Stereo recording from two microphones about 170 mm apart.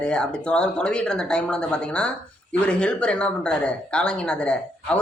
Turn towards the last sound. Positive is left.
turn(degrees=5)  # may be behind; listen again after turning